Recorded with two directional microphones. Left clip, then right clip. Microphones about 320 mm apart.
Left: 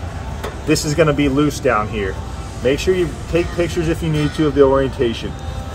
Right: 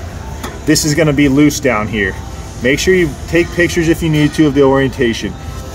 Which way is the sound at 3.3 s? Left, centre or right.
Right.